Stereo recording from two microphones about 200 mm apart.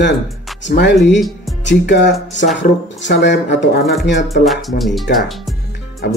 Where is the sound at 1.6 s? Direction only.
60° left (ahead or behind).